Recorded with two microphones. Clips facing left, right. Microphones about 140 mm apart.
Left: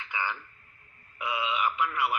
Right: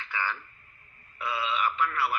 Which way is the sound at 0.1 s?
15° left (ahead or behind).